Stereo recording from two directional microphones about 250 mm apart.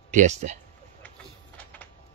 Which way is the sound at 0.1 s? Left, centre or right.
Right.